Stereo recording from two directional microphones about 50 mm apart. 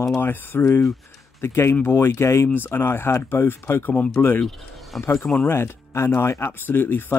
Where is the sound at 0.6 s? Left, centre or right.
Left.